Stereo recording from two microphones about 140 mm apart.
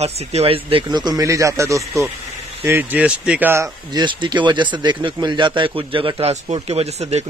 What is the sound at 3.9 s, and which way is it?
Speech, 35° right (ahead or behind).